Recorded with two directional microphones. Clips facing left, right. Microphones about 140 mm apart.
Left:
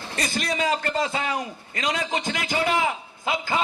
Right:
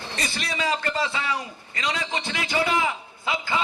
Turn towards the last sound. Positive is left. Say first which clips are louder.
# left 1 dB
turn(degrees=45)  # may be behind; listen again after turning